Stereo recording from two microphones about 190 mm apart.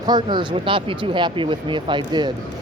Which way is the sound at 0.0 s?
25° right (ahead or behind).